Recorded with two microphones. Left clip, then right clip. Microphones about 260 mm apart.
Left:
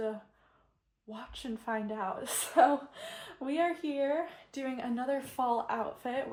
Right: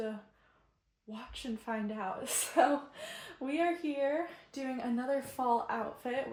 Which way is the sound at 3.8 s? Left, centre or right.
Left.